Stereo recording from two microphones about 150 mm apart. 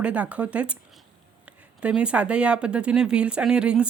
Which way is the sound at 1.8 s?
5° right (ahead or behind).